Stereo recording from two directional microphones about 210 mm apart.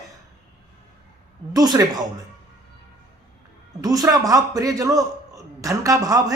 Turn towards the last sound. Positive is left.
turn(degrees=-15)  # may be behind; listen again after turning